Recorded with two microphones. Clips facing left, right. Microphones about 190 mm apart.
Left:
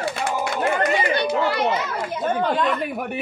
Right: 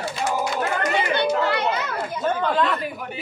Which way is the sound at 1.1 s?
60° right (ahead or behind).